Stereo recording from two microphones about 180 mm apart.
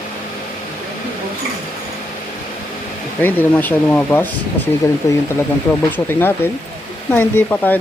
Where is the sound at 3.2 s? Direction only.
10° left (ahead or behind).